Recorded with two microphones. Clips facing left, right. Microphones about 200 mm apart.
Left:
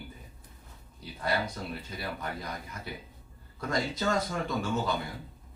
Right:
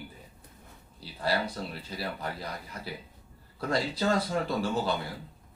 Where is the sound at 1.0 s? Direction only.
30° right (ahead or behind).